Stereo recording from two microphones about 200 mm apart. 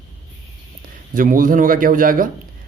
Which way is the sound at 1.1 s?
45° right (ahead or behind).